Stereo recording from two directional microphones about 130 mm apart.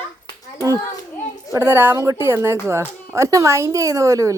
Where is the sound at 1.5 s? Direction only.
15° right (ahead or behind).